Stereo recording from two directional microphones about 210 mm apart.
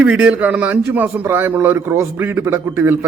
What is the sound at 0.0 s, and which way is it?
A man's voice, 10° right (ahead or behind).